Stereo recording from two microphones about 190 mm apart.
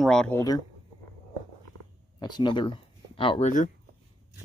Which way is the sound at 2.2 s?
25° left (ahead or behind).